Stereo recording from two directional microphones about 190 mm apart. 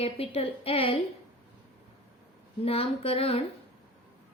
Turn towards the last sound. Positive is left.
turn(degrees=30)  # may be behind; listen again after turning